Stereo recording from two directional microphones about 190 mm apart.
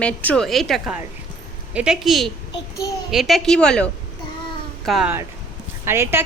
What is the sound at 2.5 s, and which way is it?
Child singing, 20° left (ahead or behind).